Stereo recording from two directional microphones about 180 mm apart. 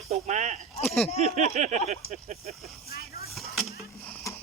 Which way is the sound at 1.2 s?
40° right (ahead or behind).